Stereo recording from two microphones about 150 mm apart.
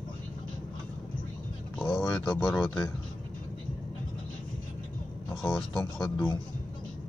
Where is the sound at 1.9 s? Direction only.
Centre (ahead or behind).